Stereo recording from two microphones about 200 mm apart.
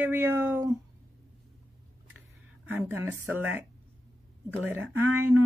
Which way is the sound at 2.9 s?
10° right (ahead or behind).